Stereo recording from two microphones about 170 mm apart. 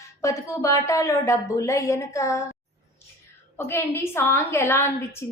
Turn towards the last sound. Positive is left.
turn(degrees=15)  # may be behind; listen again after turning